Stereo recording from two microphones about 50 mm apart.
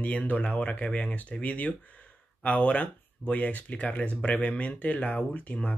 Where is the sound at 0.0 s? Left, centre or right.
Left.